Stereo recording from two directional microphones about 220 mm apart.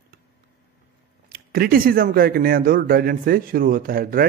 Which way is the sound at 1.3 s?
45° right (ahead or behind).